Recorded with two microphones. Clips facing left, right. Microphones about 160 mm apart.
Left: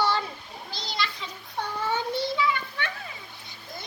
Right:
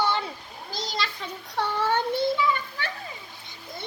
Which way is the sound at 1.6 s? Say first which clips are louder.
Right 4 dB; 80° right.